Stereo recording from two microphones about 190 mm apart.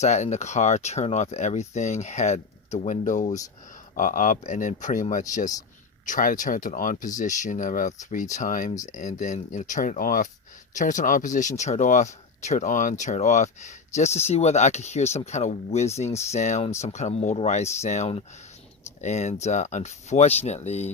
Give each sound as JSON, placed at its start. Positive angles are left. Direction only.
{"t": 0.0, "sound": "speech", "side_deg": 35}